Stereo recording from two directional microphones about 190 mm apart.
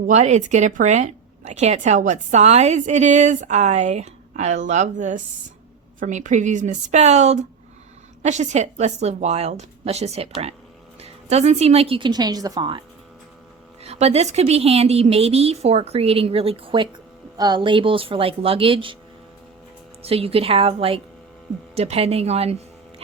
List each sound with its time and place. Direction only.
0.1 s a woman's voice: 40° right (ahead or behind)
13.8 s a woman's voice: 35° right (ahead or behind)
20.0 s a woman's voice: 30° right (ahead or behind)